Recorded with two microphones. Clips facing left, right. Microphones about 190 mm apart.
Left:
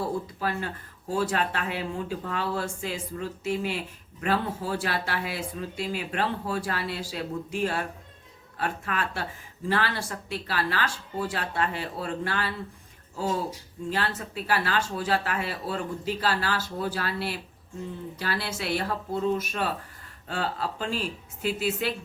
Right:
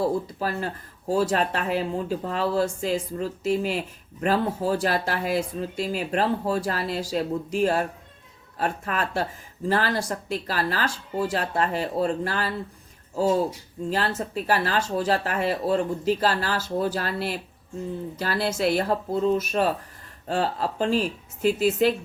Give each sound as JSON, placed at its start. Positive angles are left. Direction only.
{"t": 0.0, "sound": "speech", "side_deg": -40}
{"t": 13.9, "sound": "speech", "side_deg": -40}